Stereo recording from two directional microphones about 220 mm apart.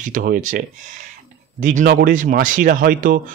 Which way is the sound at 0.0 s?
35° right (ahead or behind).